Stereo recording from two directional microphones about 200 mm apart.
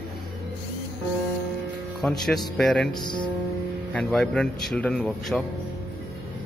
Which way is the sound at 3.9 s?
5° left (ahead or behind).